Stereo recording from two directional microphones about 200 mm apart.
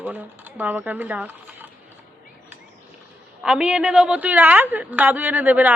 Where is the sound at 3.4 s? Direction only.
5° right (ahead or behind).